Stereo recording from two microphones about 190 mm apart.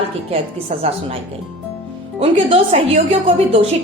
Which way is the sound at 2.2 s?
35° right (ahead or behind).